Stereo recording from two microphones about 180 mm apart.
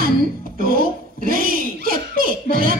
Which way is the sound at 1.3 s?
55° right (ahead or behind).